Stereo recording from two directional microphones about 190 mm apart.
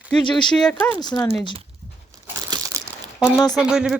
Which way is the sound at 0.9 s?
20° left (ahead or behind).